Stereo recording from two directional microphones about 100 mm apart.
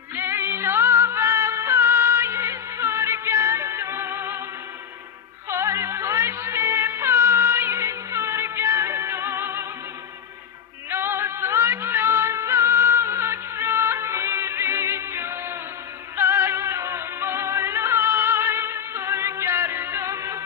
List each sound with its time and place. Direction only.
0.2 s music: 25° right (ahead or behind)
5.5 s music: 30° right (ahead or behind)
10.8 s music: 25° right (ahead or behind)